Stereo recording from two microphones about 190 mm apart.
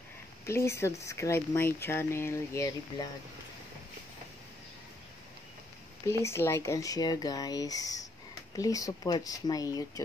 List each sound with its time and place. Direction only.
0.5 s speech: 15° left (ahead or behind)
6.0 s speech: 15° left (ahead or behind)